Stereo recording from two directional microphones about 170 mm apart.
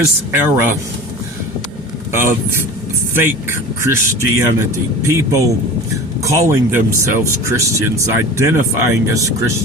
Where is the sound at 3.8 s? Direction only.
15° right (ahead or behind).